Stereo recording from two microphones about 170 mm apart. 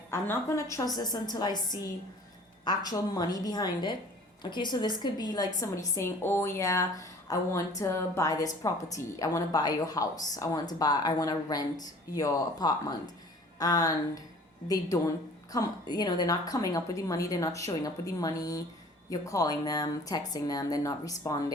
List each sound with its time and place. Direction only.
0.1 s a woman's voice: 15° left (ahead or behind)